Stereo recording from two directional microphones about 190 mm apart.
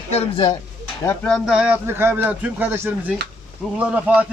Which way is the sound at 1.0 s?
5° left (ahead or behind).